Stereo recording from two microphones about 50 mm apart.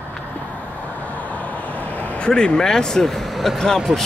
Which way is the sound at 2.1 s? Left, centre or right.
Centre.